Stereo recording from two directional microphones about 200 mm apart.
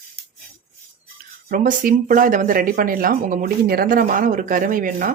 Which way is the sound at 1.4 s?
45° right (ahead or behind).